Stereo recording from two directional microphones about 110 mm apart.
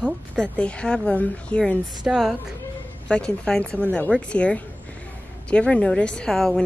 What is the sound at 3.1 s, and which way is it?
Speech, 10° left (ahead or behind).